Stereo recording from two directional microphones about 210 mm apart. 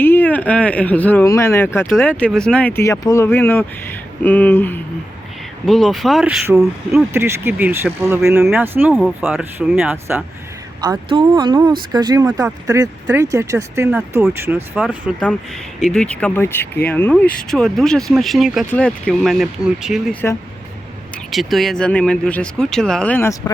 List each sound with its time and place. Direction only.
0.0 s speech: 10° left (ahead or behind); by 10.2 s 10° right (ahead or behind)
10.8 s speech: 20° right (ahead or behind); by 20.0 s centre (ahead or behind)
20.2 s speech: 10° left (ahead or behind)